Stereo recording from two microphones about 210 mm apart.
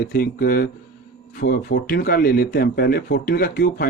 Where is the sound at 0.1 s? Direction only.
45° left (ahead or behind).